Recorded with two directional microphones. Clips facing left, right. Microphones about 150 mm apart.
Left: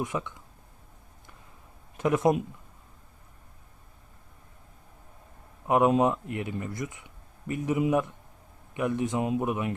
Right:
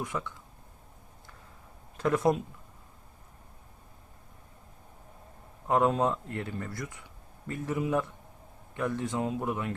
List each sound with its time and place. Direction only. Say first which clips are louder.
0.0 s speech: left 3 dB; 20° left (ahead or behind)
2.0 s speech: left 2 dB; 20° left (ahead or behind)
5.6 s speech: left 3 dB; 15° left (ahead or behind)